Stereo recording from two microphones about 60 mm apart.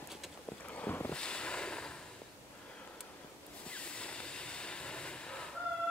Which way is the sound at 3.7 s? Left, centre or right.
Centre.